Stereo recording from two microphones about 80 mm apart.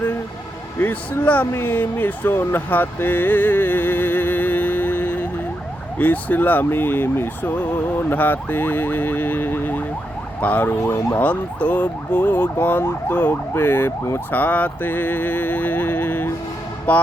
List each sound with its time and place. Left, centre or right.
0.8 s speech: left